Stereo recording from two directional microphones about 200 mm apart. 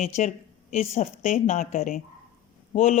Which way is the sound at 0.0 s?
35° left (ahead or behind).